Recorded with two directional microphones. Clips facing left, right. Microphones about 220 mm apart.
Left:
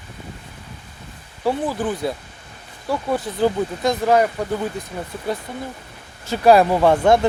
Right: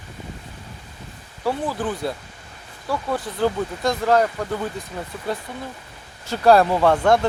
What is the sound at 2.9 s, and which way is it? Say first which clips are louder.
Speech: left 3 dB; 20° left (ahead or behind).